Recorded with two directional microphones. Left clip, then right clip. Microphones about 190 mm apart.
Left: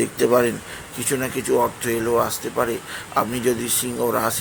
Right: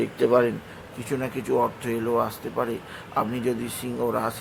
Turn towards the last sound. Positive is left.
turn(degrees=10)  # may be behind; listen again after turning